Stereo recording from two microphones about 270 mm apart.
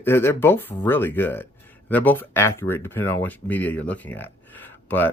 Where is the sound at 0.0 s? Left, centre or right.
Centre.